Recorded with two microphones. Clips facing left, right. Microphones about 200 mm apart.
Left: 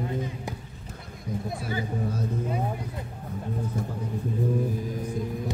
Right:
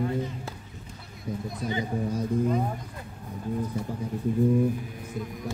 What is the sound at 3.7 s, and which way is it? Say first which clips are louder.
Speech: even; 45° left (ahead or behind).